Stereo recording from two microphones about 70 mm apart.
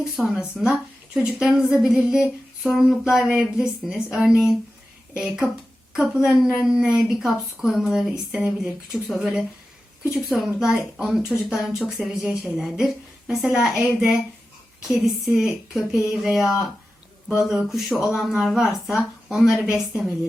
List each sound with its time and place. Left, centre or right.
0.0 s a woman's voice: centre